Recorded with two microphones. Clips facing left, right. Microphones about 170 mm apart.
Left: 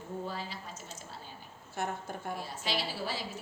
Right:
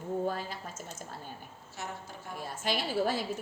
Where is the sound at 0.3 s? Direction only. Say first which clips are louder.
Right 5 dB; 50° right (ahead or behind).